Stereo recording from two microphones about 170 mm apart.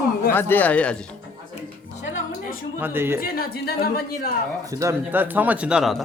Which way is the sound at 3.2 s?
60° left (ahead or behind).